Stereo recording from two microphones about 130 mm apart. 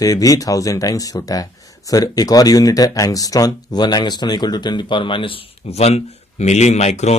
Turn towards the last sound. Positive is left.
turn(degrees=60)  # may be behind; listen again after turning